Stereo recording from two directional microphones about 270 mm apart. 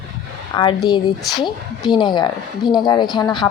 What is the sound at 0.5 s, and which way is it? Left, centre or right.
A woman's voice, centre.